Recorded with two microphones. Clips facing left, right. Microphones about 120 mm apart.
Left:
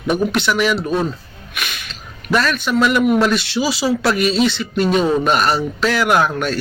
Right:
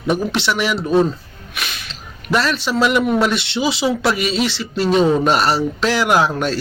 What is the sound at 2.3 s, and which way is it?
Speech, 25° right (ahead or behind).